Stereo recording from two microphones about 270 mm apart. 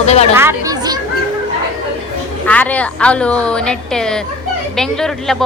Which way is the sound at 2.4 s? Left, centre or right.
Centre.